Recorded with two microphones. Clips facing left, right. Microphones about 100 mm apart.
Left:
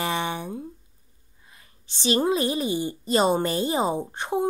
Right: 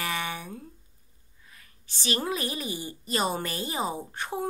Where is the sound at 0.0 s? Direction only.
25° left (ahead or behind).